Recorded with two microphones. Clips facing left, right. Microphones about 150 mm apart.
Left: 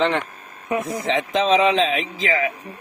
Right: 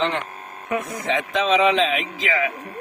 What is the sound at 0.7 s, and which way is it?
Speech, 30° left (ahead or behind).